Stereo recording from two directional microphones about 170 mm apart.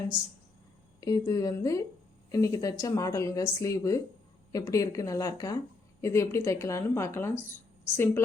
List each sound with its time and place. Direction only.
1.0 s speech: 20° left (ahead or behind)